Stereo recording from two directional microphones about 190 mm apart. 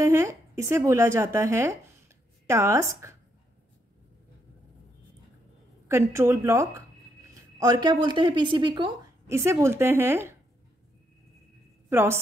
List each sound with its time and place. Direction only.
0.0 s speech: 15° right (ahead or behind)
5.9 s a woman's voice: 15° right (ahead or behind)
11.9 s a woman's voice: 10° right (ahead or behind)